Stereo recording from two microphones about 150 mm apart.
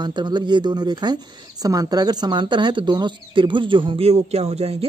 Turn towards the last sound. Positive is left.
turn(degrees=-45)  # may be behind; listen again after turning